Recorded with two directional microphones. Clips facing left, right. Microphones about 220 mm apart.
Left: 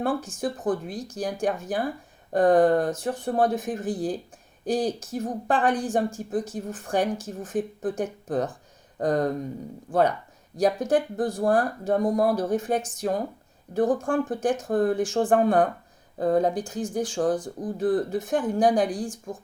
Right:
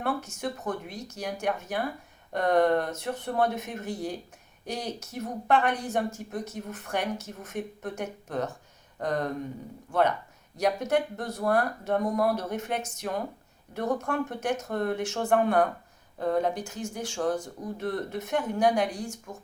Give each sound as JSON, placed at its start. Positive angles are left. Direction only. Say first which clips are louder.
{"t": 0.0, "sound": "a woman's voice", "louder": "left 4 dB", "side_deg": 30}